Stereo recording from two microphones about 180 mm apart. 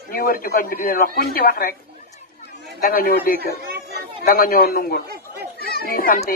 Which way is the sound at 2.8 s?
55° left (ahead or behind).